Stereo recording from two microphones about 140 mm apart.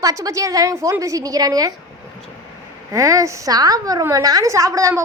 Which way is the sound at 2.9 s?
25° right (ahead or behind).